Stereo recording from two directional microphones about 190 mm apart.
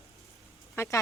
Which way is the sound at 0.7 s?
15° left (ahead or behind).